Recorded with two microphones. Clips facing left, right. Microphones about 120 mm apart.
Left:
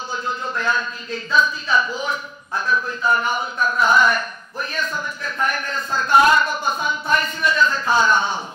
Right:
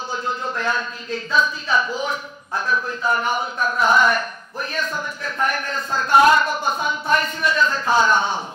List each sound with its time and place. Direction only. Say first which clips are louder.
0.1 s speech: even; 55° right (ahead or behind)
6.8 s music: right 1 dB; 55° right (ahead or behind)